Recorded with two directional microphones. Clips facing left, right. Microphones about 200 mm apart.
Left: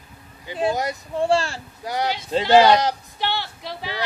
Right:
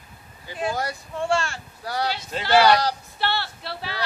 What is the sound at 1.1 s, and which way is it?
Speech, 35° left (ahead or behind).